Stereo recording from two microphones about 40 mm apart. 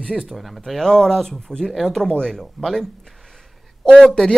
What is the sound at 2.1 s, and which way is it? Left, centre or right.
Speech, centre.